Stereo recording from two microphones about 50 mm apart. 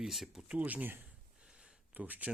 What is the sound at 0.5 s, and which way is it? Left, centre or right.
Speech, right.